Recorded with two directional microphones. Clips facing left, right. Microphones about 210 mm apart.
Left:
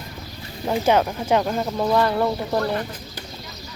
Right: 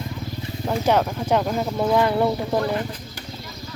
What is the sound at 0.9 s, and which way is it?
Speech, centre (ahead or behind).